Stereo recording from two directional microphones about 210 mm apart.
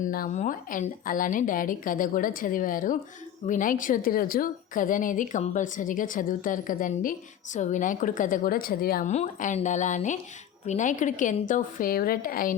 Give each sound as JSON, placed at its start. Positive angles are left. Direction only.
{"t": 0.0, "sound": "a woman's voice", "side_deg": 40}